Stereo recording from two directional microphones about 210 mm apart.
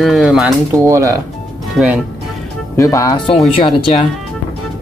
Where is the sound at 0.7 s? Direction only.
15° right (ahead or behind).